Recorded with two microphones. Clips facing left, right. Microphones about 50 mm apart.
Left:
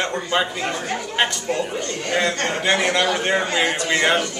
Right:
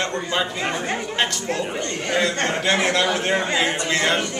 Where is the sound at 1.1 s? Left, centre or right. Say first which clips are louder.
Left 5 dB; centre.